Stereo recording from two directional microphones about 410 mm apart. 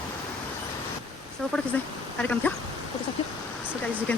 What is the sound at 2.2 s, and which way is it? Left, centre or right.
Speech, centre.